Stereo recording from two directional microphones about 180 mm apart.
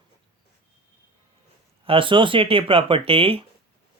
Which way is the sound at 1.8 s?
30° right (ahead or behind).